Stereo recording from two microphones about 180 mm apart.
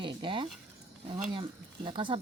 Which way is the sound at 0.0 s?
25° right (ahead or behind).